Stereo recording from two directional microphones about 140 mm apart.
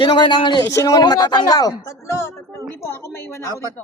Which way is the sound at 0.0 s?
35° left (ahead or behind).